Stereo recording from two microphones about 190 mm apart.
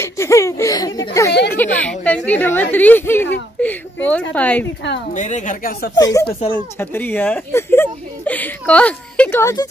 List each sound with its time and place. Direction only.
0.0 s speech: 15° left (ahead or behind)
5.1 s a woman's voice: 40° left (ahead or behind)
5.9 s speech: 20° left (ahead or behind)